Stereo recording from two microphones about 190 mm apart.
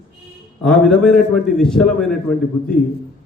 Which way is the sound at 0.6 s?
Centre (ahead or behind).